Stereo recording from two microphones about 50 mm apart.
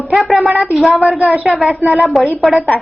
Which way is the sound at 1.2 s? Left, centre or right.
Right.